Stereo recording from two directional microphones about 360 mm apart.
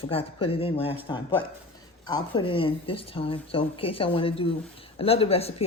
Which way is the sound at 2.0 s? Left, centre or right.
Centre.